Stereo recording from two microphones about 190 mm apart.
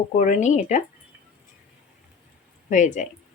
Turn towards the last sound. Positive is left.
turn(degrees=40)  # may be behind; listen again after turning